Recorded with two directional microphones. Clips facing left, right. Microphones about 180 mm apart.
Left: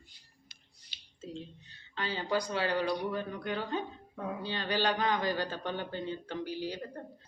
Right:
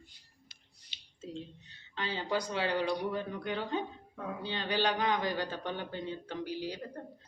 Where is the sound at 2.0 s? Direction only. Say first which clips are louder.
Left 1 dB; 20° right (ahead or behind).